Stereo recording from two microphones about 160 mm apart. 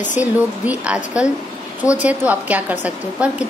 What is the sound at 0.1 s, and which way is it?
A woman's voice, 10° right (ahead or behind).